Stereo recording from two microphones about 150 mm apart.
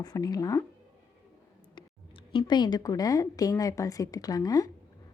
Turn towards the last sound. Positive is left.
turn(degrees=25)  # may be behind; listen again after turning